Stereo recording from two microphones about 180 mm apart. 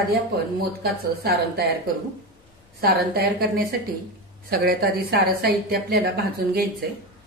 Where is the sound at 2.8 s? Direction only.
60° right (ahead or behind).